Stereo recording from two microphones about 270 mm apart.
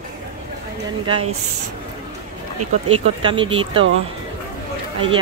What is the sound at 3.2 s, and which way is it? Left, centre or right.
Speech, centre.